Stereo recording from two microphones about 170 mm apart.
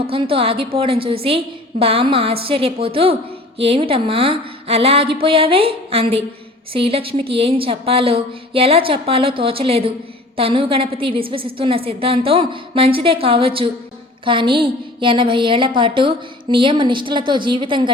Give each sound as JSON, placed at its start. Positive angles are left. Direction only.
{"t": 0.1, "sound": "a woman's voice", "side_deg": -35}